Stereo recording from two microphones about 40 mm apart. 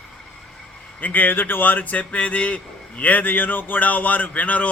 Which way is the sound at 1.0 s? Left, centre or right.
Left.